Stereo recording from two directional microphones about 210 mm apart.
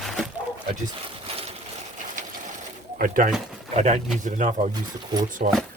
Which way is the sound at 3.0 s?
40° right (ahead or behind).